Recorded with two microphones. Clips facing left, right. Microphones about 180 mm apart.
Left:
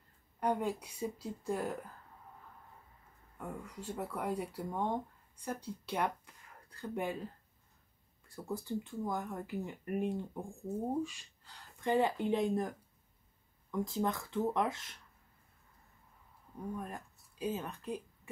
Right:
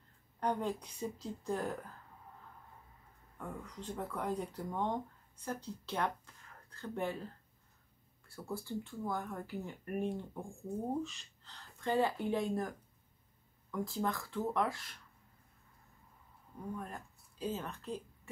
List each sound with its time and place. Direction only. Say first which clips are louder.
0.4 s a woman's voice: left 2 dB; 10° left (ahead or behind)
3.3 s speech: left 1 dB; 10° left (ahead or behind)
8.3 s a woman's voice: left 2 dB; 15° left (ahead or behind)
16.7 s a woman's voice: left 2 dB; 15° left (ahead or behind)